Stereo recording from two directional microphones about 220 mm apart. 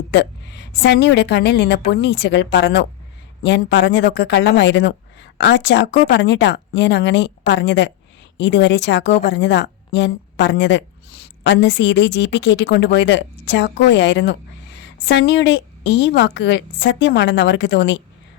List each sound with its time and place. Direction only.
0.7 s a woman's voice: 50° left (ahead or behind)